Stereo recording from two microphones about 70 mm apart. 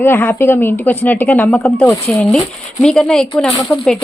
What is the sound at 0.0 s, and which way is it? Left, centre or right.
A woman's voice, left.